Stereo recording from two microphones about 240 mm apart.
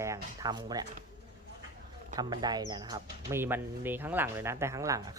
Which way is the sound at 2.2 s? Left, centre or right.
Centre.